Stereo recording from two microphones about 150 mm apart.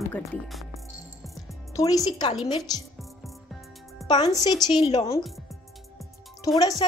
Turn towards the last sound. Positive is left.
turn(degrees=25)  # may be behind; listen again after turning